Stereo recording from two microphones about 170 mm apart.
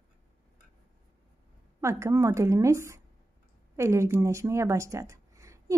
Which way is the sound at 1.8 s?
15° right (ahead or behind).